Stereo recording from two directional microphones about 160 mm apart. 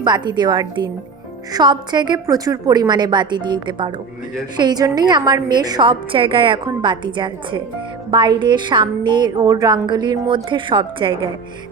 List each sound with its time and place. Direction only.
0.0 s a woman's voice: 25° right (ahead or behind)